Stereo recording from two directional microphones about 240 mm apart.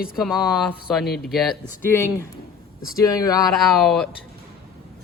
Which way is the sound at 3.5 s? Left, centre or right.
Centre.